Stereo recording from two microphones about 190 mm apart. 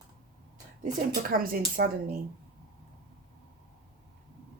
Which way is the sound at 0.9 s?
50° right (ahead or behind).